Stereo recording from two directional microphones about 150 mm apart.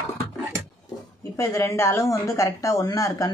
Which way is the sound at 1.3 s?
20° left (ahead or behind).